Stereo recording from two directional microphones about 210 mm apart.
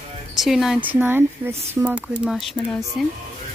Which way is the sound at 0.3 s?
Centre (ahead or behind).